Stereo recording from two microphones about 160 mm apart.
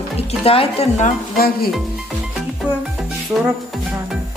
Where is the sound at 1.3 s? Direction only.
70° left (ahead or behind).